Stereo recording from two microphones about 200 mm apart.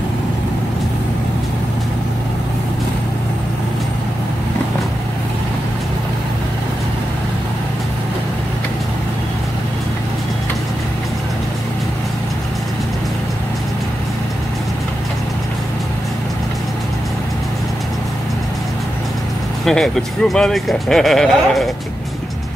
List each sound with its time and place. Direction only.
19.6 s speech: centre (ahead or behind)